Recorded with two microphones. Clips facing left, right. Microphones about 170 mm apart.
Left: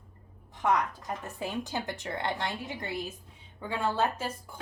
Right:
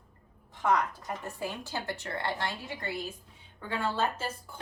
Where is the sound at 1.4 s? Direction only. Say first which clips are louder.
Left 2 dB; 15° left (ahead or behind).